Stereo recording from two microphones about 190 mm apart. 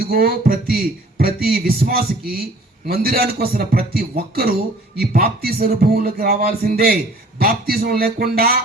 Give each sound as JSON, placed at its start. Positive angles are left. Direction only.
{"t": 0.0, "sound": "speech", "side_deg": -55}